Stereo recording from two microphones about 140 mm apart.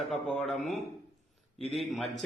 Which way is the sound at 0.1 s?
Centre (ahead or behind).